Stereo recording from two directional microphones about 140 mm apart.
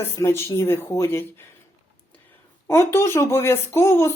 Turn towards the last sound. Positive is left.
turn(degrees=20)  # may be behind; listen again after turning